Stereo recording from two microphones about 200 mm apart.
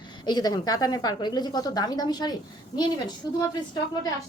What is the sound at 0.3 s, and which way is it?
A woman's voice, 20° left (ahead or behind).